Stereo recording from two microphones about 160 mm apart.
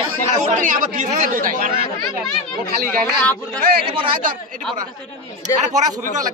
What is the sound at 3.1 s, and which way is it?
Speech, 5° left (ahead or behind).